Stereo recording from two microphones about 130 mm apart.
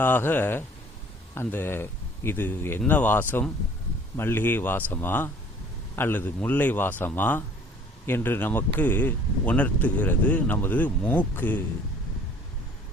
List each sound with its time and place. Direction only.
0.0 s speech: 15° left (ahead or behind)